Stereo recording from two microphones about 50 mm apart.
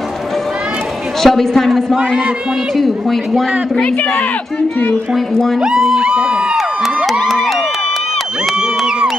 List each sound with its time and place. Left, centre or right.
1.2 s a woman's voice: centre
5.6 s speech: centre
7.1 s crowd: centre